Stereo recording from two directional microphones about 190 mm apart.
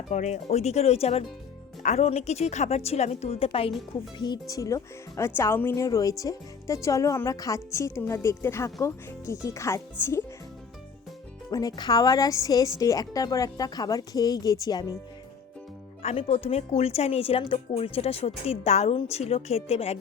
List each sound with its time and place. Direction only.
0.1 s a woman's voice: 35° left (ahead or behind); by 10.2 s 15° left (ahead or behind)
11.5 s speech: 20° left (ahead or behind)
16.0 s a woman's voice: 35° left (ahead or behind)